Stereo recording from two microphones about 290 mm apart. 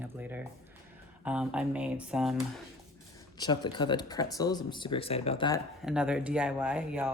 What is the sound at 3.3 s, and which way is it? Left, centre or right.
Speech, centre.